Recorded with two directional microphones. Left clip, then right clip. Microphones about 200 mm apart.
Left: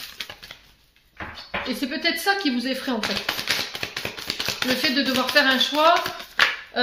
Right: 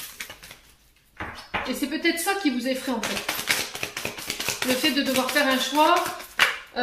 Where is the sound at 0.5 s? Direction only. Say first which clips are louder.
Left 4 dB; 40° left (ahead or behind).